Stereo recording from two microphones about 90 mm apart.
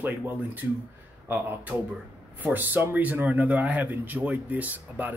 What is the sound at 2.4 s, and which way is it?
Speech, 20° right (ahead or behind).